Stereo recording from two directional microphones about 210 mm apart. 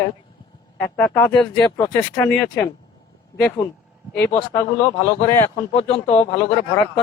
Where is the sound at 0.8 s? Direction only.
10° left (ahead or behind).